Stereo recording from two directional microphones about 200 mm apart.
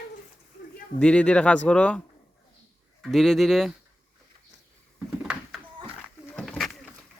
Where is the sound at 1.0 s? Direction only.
5° left (ahead or behind).